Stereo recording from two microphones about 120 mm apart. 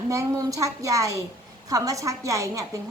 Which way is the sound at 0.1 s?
25° right (ahead or behind).